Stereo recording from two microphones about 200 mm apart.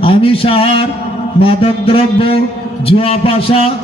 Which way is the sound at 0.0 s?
25° left (ahead or behind).